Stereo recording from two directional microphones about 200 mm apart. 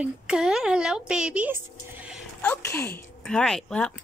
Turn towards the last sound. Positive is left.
turn(degrees=5)  # may be behind; listen again after turning